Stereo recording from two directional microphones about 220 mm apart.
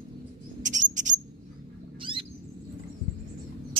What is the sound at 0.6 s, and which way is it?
Mouse, 35° right (ahead or behind).